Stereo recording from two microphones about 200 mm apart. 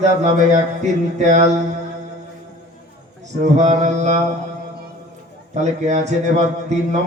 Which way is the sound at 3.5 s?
35° right (ahead or behind).